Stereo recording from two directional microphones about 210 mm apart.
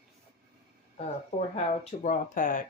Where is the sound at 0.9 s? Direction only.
30° left (ahead or behind).